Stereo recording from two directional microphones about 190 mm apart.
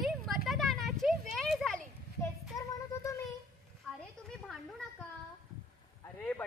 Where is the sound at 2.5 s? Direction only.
15° left (ahead or behind).